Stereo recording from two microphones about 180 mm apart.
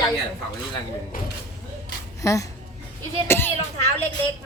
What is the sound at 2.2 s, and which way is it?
Speech, 20° left (ahead or behind).